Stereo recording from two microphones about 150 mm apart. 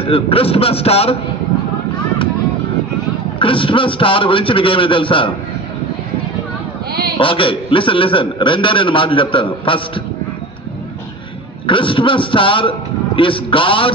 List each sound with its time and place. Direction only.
0.0 s a man's voice: 40° left (ahead or behind)
3.3 s a man's voice: 35° left (ahead or behind)
7.2 s a man's voice: 35° left (ahead or behind)
11.6 s a man's voice: 35° left (ahead or behind)